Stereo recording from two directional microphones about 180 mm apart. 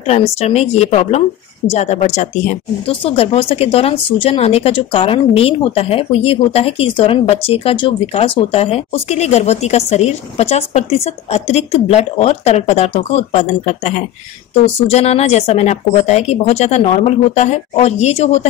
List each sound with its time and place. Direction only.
0.0 s speech: 35° left (ahead or behind)